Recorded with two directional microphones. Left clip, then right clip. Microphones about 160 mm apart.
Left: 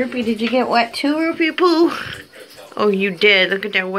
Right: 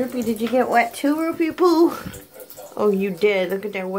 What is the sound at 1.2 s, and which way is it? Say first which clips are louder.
Speech: left 4 dB; 15° right (ahead or behind).